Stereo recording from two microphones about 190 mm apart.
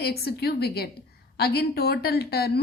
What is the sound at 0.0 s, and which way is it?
A woman's voice, 60° left (ahead or behind).